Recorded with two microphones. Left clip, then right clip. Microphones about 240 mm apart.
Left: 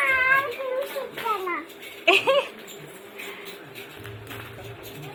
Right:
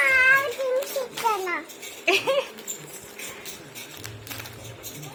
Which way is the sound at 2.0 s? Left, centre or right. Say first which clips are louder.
Left 3 dB; centre.